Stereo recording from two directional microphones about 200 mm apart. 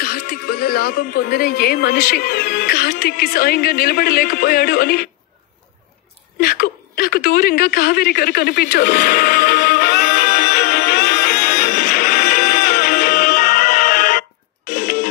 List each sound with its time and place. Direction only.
0.0 s speech: 50° left (ahead or behind)
6.4 s a sound: 50° left (ahead or behind)
14.7 s music: 45° left (ahead or behind)